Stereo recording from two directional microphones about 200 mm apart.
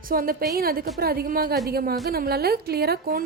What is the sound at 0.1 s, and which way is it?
A woman's voice, 45° right (ahead or behind).